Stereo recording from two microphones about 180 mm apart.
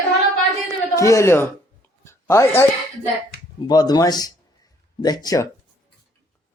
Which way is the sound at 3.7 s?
20° left (ahead or behind).